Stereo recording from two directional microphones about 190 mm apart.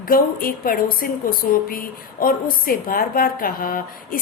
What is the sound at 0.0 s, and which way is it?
A woman's voice, 50° left (ahead or behind).